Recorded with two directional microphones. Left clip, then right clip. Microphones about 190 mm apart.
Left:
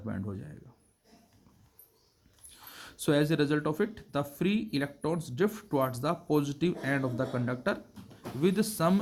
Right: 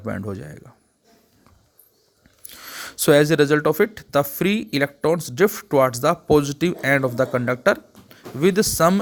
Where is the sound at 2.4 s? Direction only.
35° right (ahead or behind).